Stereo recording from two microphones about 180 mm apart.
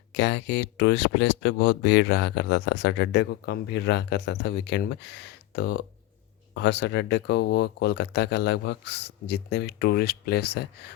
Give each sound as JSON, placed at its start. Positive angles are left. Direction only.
{"t": 0.1, "sound": "speech", "side_deg": 70}